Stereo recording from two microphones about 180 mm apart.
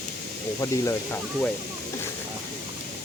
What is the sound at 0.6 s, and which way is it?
Speech, 15° left (ahead or behind).